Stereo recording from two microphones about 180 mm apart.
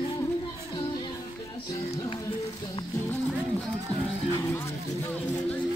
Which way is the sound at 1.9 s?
20° left (ahead or behind).